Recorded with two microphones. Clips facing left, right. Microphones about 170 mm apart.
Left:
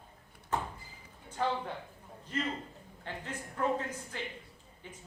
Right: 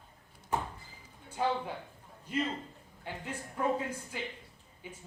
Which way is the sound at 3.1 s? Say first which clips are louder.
Even; 10° right (ahead or behind).